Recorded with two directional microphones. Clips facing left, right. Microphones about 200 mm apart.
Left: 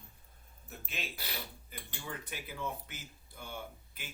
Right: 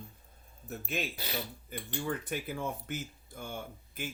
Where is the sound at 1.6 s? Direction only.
50° right (ahead or behind).